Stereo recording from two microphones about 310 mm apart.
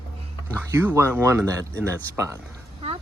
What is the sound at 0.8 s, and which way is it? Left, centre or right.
Speech, centre.